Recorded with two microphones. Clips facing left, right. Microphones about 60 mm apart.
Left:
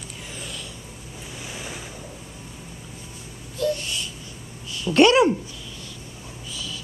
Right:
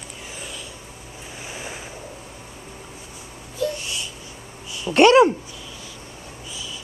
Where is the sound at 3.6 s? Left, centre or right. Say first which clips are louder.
Left 1 dB; centre.